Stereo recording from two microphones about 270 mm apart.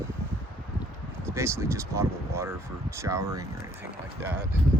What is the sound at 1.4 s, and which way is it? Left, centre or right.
Speech, centre.